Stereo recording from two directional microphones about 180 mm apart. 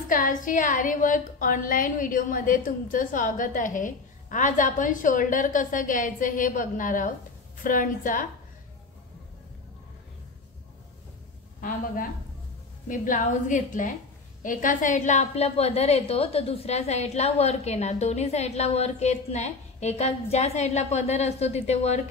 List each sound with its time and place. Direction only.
0.1 s a woman's voice: 45° left (ahead or behind)
11.6 s a woman's voice: 50° left (ahead or behind)